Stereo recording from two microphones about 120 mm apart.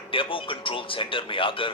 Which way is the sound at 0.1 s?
45° left (ahead or behind).